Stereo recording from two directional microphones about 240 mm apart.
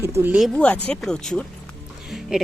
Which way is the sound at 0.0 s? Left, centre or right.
Centre.